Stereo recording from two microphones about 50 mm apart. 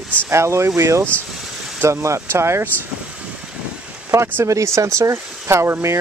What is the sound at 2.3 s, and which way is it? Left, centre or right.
Speech, right.